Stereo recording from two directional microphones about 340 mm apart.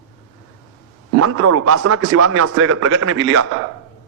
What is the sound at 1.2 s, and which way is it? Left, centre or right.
A man's voice, right.